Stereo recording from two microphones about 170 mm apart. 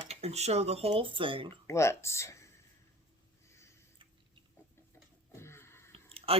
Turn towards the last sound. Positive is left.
turn(degrees=-35)  # may be behind; listen again after turning